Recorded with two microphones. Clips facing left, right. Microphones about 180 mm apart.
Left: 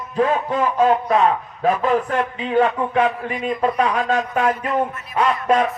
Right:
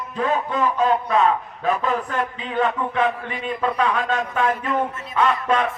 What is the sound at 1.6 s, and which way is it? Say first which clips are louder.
A man's voice: left 5 dB; 40° left (ahead or behind).